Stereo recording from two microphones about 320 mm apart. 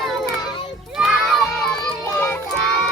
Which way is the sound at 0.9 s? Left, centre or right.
Centre.